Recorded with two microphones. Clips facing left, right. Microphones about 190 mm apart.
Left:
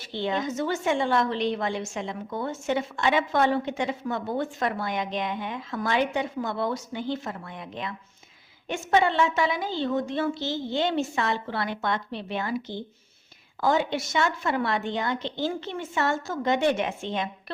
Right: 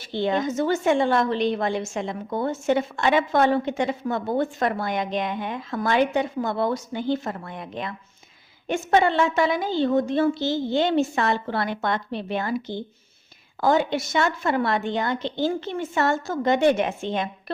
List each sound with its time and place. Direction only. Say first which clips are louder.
0.1 s a woman's voice: right 4 dB; 45° right (ahead or behind)